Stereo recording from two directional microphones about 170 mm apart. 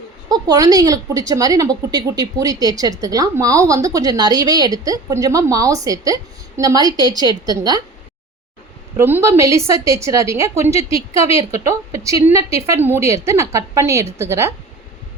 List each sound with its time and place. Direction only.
0.3 s a woman's voice: 20° right (ahead or behind)
9.0 s a woman's voice: 15° right (ahead or behind)